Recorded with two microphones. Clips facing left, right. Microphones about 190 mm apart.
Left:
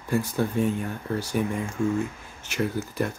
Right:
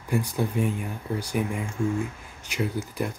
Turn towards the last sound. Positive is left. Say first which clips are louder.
# left 2 dB
turn(degrees=-15)  # may be behind; listen again after turning